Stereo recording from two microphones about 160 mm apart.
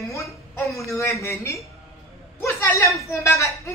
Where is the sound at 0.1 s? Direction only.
20° left (ahead or behind).